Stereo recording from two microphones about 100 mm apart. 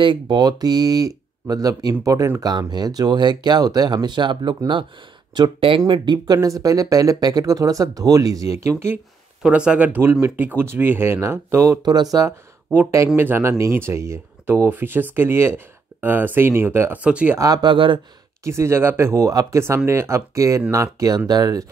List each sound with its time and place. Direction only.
0.0 s speech: 55° right (ahead or behind); by 2.4 s 30° right (ahead or behind)
2.4 s speech: 45° right (ahead or behind); by 9.0 s 25° right (ahead or behind)
9.4 s speech: 10° right (ahead or behind); by 11.8 s 25° right (ahead or behind)
11.8 s speech: 45° right (ahead or behind)
12.9 s speech: 25° right (ahead or behind)
17.4 s speech: 40° right (ahead or behind)
18.4 s speech: 25° right (ahead or behind)
21.3 s speech: 40° right (ahead or behind)